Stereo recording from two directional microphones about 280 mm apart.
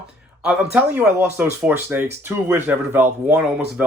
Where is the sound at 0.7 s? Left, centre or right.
Centre.